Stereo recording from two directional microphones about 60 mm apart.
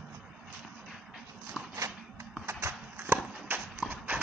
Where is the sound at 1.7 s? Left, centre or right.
Right.